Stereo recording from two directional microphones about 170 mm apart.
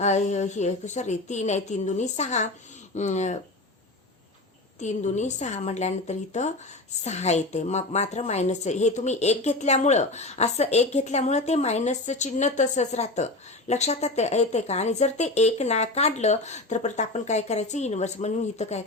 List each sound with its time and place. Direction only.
0.0 s a woman's voice: 45° left (ahead or behind)
4.8 s a woman's voice: 45° left (ahead or behind)